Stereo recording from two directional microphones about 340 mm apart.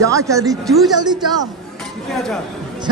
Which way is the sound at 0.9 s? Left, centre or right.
Centre.